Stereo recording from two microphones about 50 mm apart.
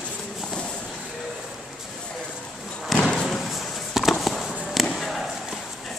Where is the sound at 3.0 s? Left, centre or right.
Centre.